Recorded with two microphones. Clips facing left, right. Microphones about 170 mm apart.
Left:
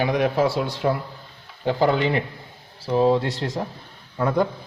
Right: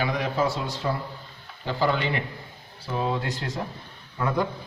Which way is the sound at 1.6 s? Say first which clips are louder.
Left 5 dB; 50° left (ahead or behind).